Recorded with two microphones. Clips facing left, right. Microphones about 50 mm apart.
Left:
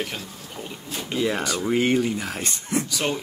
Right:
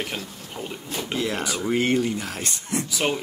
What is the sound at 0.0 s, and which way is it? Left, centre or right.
Speech, centre.